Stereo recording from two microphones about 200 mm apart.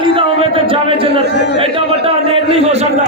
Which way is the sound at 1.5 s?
30° right (ahead or behind).